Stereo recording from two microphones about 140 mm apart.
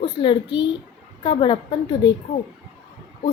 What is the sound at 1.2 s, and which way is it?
Speech, 30° left (ahead or behind).